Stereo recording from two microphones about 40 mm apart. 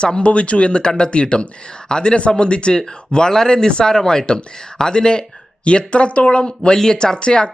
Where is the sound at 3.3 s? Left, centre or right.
Centre.